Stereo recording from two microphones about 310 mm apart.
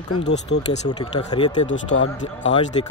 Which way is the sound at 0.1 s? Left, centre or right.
Left.